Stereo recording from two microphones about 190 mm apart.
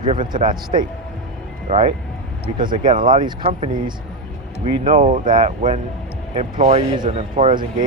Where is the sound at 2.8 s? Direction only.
45° right (ahead or behind).